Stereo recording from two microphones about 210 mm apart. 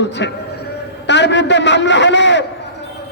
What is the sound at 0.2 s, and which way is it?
A man's voice, 55° left (ahead or behind).